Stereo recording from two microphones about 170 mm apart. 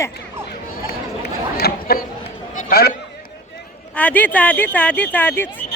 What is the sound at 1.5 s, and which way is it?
Chatter, 65° left (ahead or behind).